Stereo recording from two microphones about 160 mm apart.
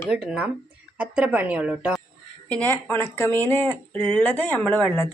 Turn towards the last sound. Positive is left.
turn(degrees=10)  # may be behind; listen again after turning